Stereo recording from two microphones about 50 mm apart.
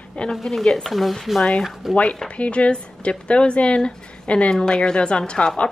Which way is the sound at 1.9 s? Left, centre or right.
Left.